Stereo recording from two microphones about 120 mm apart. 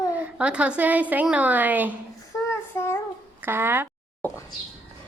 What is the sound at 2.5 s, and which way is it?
Child singing, 20° left (ahead or behind).